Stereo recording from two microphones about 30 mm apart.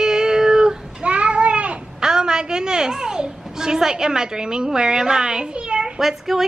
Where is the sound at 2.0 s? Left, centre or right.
Right.